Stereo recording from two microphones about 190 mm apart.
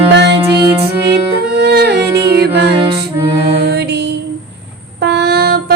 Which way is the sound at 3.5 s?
60° right (ahead or behind).